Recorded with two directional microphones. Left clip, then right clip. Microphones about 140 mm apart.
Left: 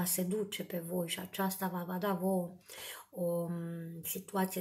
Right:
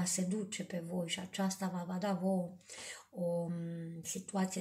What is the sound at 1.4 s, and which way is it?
Speech, 30° left (ahead or behind).